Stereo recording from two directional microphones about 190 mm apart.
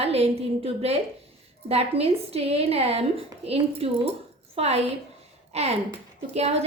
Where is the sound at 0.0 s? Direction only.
30° right (ahead or behind).